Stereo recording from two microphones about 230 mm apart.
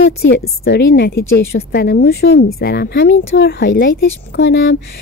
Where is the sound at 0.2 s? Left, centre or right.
Left.